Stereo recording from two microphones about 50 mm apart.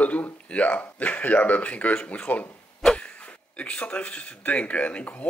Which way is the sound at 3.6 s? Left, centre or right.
Left.